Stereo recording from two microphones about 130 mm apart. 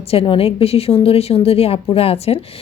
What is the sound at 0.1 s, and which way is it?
A woman's voice, 45° left (ahead or behind).